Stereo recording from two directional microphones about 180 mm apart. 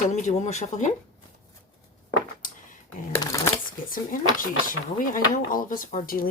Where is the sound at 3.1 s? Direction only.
20° left (ahead or behind).